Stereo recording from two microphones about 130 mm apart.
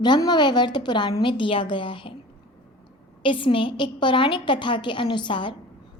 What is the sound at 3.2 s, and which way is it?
A woman's voice, 40° left (ahead or behind).